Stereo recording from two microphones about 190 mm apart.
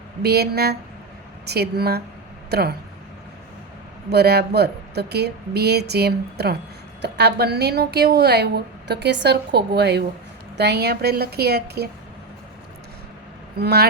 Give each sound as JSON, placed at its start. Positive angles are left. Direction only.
{"t": 0.2, "sound": "a woman's voice", "side_deg": -55}
{"t": 4.1, "sound": "a woman's voice", "side_deg": -60}
{"t": 13.6, "sound": "a woman's voice", "side_deg": -55}